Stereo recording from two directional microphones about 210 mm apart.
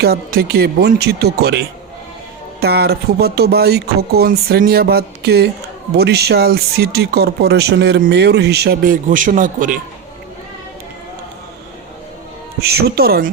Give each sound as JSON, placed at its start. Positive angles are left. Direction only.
{"t": 0.0, "sound": "speech", "side_deg": -45}
{"t": 12.6, "sound": "speech", "side_deg": -50}